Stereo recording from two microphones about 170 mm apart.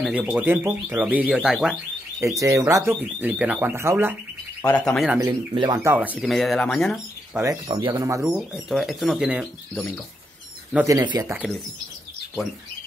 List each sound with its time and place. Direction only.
0.0 s speech: 5° right (ahead or behind)
2.1 s speech: 15° right (ahead or behind)
4.6 s speech: 10° left (ahead or behind)
5.5 s speech: 25° right (ahead or behind); by 7.0 s 5° left (ahead or behind)
7.3 s speech: 20° right (ahead or behind)
8.2 s speech: 5° right (ahead or behind)
10.9 s speech: 20° right (ahead or behind)
11.3 s speech: centre (ahead or behind)